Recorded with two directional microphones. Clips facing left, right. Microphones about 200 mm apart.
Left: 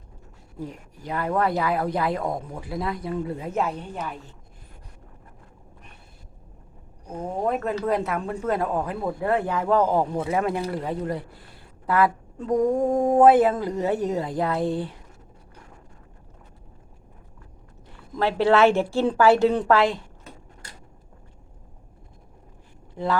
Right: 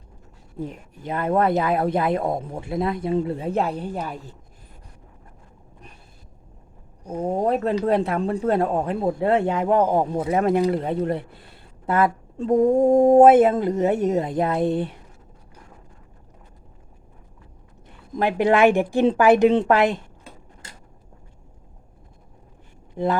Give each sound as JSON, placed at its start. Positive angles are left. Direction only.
{"t": 0.6, "sound": "speech", "side_deg": -25}
{"t": 7.2, "sound": "speech", "side_deg": -35}
{"t": 18.2, "sound": "a woman's voice", "side_deg": -15}